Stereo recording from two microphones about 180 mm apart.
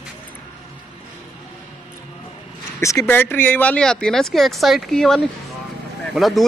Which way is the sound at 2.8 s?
15° left (ahead or behind).